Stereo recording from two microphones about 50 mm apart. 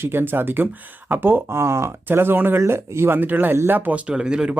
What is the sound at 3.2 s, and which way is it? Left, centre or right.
Speech, right.